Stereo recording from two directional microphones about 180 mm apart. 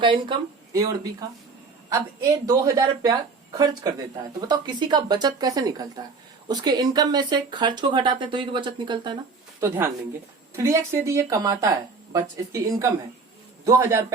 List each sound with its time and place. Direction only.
0.0 s a woman's voice: 25° right (ahead or behind)
9.6 s a woman's voice: 15° right (ahead or behind)